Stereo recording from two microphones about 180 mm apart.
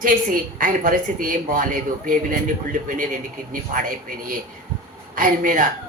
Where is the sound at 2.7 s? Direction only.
50° right (ahead or behind).